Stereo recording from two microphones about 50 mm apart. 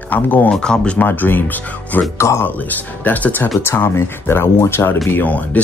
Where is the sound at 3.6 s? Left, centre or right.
Left.